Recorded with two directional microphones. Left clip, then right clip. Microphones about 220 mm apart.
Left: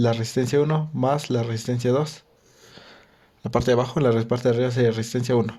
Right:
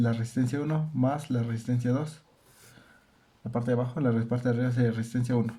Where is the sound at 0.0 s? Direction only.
40° left (ahead or behind).